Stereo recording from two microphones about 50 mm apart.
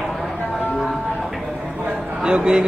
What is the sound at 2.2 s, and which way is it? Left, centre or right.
Speech, centre.